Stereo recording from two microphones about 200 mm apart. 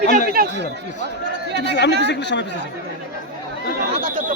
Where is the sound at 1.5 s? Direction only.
60° left (ahead or behind).